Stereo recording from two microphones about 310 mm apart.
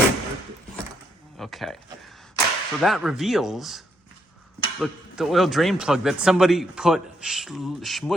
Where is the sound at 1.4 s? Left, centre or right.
Centre.